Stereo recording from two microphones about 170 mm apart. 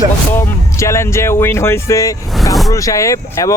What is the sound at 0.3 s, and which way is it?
Speech, 15° left (ahead or behind).